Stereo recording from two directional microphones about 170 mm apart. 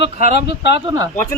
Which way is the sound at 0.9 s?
20° right (ahead or behind).